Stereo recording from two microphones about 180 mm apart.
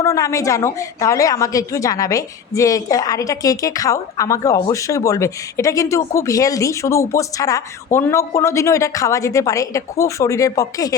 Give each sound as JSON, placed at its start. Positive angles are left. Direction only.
{"t": 0.0, "sound": "a woman's voice", "side_deg": 20}